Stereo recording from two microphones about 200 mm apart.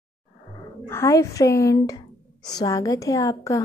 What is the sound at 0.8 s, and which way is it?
A woman's voice, 15° left (ahead or behind).